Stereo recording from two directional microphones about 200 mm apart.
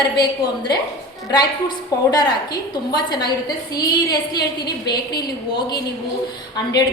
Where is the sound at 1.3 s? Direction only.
20° left (ahead or behind).